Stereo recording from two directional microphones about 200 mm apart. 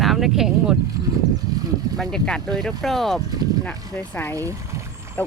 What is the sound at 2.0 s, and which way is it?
Speech, 5° left (ahead or behind).